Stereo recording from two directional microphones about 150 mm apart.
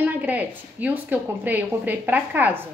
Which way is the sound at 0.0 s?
10° right (ahead or behind).